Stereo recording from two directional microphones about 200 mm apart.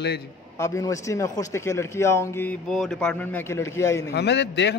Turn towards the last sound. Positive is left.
turn(degrees=60)  # may be behind; listen again after turning